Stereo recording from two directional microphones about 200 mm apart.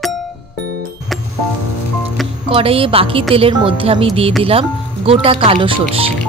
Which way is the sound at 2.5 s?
30° right (ahead or behind).